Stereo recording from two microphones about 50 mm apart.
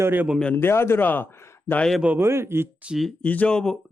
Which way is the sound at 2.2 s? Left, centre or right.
Right.